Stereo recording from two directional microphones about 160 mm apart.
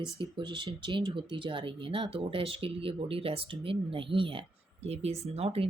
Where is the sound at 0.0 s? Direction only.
30° right (ahead or behind).